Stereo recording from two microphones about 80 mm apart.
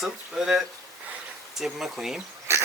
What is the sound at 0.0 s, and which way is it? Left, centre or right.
Speech, centre.